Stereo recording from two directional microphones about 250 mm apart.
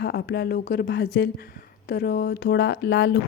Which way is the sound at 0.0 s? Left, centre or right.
Left.